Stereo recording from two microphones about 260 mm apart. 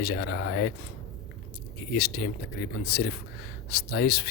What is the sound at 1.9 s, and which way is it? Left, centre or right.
Speech, left.